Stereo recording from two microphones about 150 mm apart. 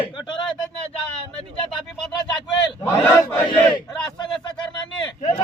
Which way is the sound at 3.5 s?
30° left (ahead or behind).